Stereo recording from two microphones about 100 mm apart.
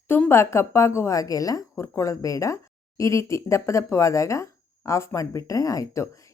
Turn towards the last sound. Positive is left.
turn(degrees=30)  # may be behind; listen again after turning